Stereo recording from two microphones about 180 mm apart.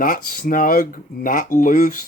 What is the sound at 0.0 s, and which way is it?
Speech, 55° left (ahead or behind).